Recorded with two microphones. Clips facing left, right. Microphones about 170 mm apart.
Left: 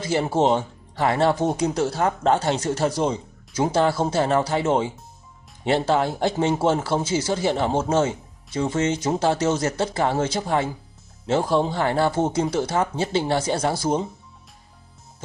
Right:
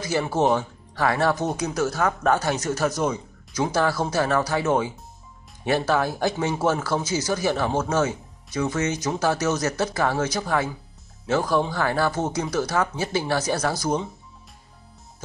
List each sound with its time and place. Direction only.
0.0 s speech: 25° left (ahead or behind)